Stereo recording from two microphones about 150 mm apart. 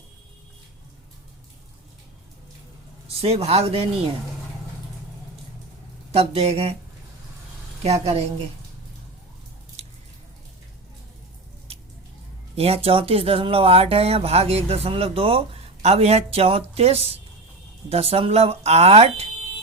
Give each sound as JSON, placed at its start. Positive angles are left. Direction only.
{"t": 3.2, "sound": "speech", "side_deg": -45}
{"t": 6.1, "sound": "speech", "side_deg": -45}
{"t": 7.9, "sound": "speech", "side_deg": -45}
{"t": 12.5, "sound": "speech", "side_deg": -40}